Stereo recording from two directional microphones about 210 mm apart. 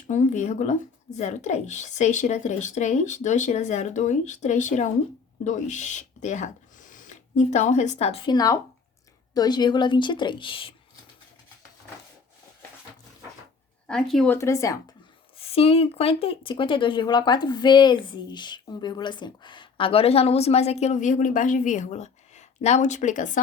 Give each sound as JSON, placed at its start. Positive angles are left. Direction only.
{"t": 0.1, "sound": "speech", "side_deg": 35}
{"t": 13.8, "sound": "speech", "side_deg": 5}
{"t": 14.3, "sound": "speech", "side_deg": 15}
{"t": 15.4, "sound": "speech", "side_deg": 30}